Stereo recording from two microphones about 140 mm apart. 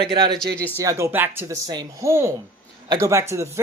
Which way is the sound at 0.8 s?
20° right (ahead or behind).